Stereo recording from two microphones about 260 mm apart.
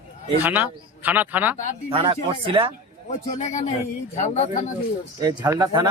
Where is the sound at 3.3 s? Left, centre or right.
Left.